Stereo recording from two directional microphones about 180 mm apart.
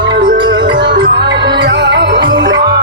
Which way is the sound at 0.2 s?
65° right (ahead or behind).